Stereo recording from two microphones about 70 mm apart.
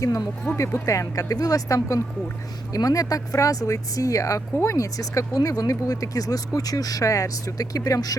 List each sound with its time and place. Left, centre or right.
0.5 s speech: left